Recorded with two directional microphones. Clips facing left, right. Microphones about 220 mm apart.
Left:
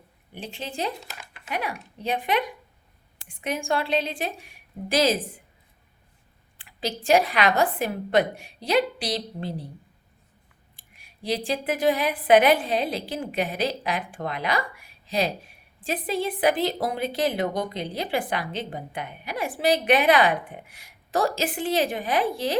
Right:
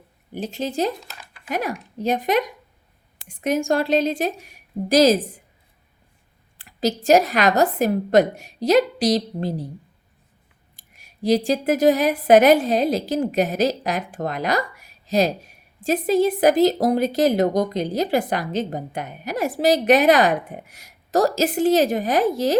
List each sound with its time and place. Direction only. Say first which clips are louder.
0.3 s speech: right 8 dB; 40° right (ahead or behind)
6.6 s speech: right 8 dB; 40° right (ahead or behind)
10.8 s speech: right 11 dB; 40° right (ahead or behind)